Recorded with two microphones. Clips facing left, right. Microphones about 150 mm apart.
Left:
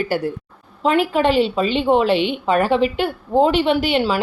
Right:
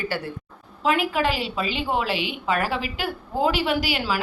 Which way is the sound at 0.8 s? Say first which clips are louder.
Left 6 dB; 30° left (ahead or behind).